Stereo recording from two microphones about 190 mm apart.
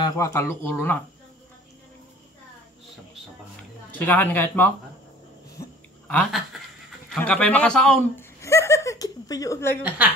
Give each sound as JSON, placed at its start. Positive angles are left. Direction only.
{"t": 0.0, "sound": "speech", "side_deg": 15}
{"t": 4.0, "sound": "speech", "side_deg": 10}
{"t": 5.6, "sound": "a sound", "side_deg": 10}
{"t": 7.2, "sound": "a man's voice", "side_deg": 5}
{"t": 8.4, "sound": "a sound", "side_deg": 15}
{"t": 9.8, "sound": "a woman's voice", "side_deg": -5}